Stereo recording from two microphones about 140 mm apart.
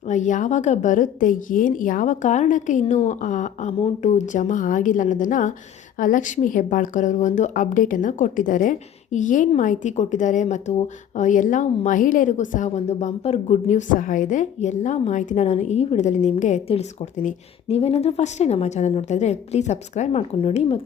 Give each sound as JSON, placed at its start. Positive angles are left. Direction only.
{"t": 0.1, "sound": "a woman's voice", "side_deg": 65}